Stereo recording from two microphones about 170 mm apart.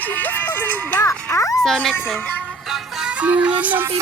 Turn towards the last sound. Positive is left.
turn(degrees=-10)  # may be behind; listen again after turning